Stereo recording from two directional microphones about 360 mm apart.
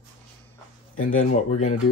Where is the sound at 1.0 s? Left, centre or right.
Centre.